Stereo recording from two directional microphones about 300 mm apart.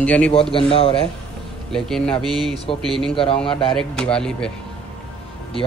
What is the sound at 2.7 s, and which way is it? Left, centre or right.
Speech, centre.